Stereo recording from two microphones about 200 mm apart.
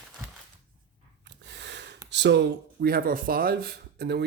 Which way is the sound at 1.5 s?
60° right (ahead or behind).